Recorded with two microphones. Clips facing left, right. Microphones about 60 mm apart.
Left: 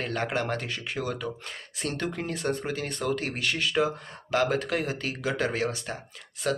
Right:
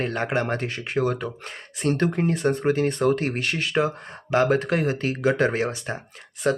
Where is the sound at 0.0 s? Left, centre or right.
Right.